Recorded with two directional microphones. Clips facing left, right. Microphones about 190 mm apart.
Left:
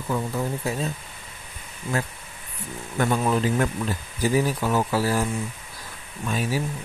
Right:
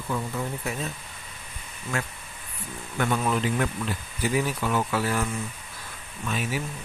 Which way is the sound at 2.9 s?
35° left (ahead or behind).